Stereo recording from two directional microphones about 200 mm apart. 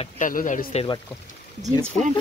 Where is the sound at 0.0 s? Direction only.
40° left (ahead or behind).